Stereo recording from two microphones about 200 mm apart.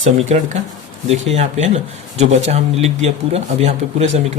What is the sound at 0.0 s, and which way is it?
Speech, 35° right (ahead or behind).